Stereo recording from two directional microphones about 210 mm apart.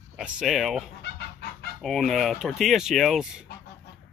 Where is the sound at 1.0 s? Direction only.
50° left (ahead or behind).